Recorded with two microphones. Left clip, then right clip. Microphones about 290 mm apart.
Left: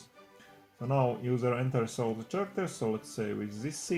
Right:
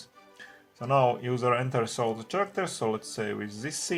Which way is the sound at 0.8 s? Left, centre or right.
Right.